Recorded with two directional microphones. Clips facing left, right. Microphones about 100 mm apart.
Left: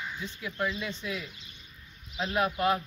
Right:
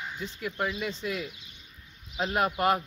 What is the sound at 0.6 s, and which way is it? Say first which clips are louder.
Speech: right 1 dB; 60° right (ahead or behind).